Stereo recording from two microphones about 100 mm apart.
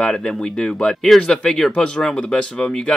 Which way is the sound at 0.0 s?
5° left (ahead or behind).